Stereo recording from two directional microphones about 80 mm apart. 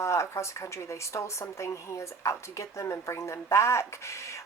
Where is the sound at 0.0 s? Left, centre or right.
Left.